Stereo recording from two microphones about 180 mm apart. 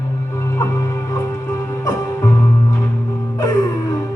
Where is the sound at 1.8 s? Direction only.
20° left (ahead or behind).